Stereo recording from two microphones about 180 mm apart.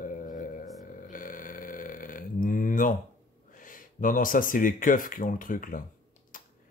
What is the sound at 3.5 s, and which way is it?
Speech, 50° left (ahead or behind).